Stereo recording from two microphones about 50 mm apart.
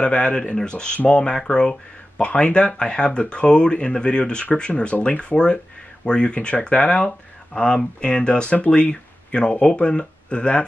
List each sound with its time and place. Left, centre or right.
0.0 s speech: centre